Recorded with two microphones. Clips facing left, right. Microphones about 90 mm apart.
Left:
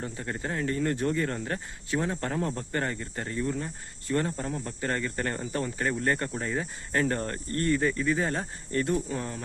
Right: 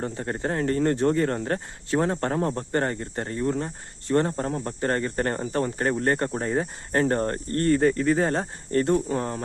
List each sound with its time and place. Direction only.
0.0 s speech: 35° right (ahead or behind)